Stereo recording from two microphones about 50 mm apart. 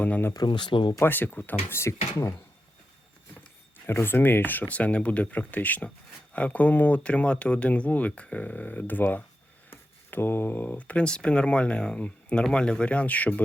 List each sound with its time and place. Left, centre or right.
0.0 s speech: left
1.7 s speech: left
3.8 s speech: left
4.7 s speech: left
9.6 s speech: left